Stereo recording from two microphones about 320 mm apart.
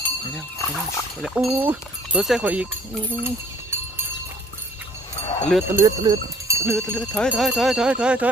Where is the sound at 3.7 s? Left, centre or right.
Centre.